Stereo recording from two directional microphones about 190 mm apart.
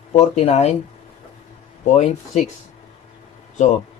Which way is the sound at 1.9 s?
35° left (ahead or behind).